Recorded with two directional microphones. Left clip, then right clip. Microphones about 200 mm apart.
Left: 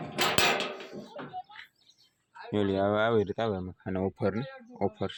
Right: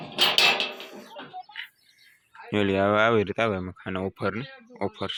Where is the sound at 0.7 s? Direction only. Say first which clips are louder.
Right 2 dB; 25° left (ahead or behind).